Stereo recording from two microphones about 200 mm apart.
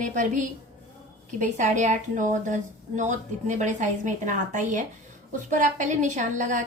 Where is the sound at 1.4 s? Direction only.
35° right (ahead or behind).